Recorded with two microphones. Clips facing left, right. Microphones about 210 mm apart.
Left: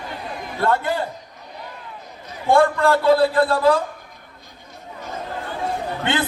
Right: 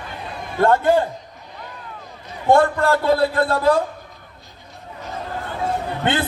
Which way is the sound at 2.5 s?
45° right (ahead or behind).